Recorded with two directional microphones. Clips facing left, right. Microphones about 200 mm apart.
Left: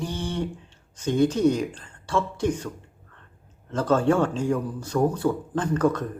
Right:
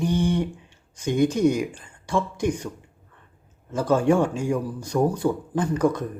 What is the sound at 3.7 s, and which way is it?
A man's voice, 10° right (ahead or behind).